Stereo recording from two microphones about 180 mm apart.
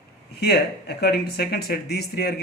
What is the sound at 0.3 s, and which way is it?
Speech, 65° left (ahead or behind).